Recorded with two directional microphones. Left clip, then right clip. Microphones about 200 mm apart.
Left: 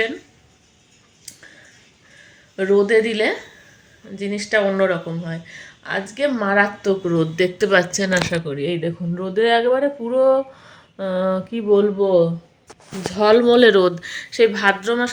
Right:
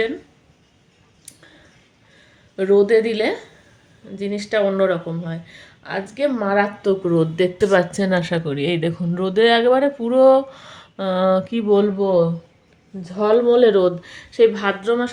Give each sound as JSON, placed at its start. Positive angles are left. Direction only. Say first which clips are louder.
{"t": 2.6, "sound": "speech", "louder": "right 1 dB", "side_deg": -5}
{"t": 6.8, "sound": "speech", "louder": "right 1 dB", "side_deg": -20}
{"t": 13.1, "sound": "speech", "louder": "left 2 dB", "side_deg": 10}